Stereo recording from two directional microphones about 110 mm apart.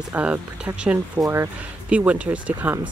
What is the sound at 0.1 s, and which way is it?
Speech, 15° right (ahead or behind).